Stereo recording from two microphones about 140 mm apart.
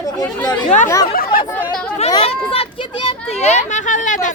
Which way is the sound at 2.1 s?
40° left (ahead or behind).